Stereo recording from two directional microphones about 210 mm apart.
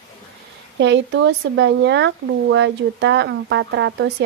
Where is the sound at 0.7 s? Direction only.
55° right (ahead or behind).